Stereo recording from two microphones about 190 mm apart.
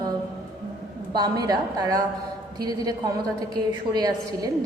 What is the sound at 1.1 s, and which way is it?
A woman's voice, 20° right (ahead or behind).